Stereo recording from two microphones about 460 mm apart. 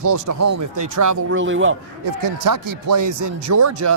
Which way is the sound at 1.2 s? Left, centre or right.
Right.